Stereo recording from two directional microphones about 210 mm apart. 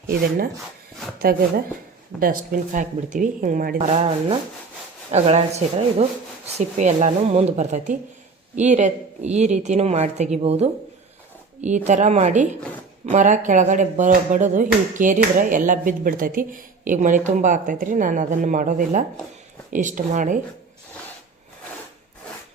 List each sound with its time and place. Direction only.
1.2 s speech: 45° right (ahead or behind); by 10.7 s 30° right (ahead or behind)
11.9 s speech: 35° right (ahead or behind)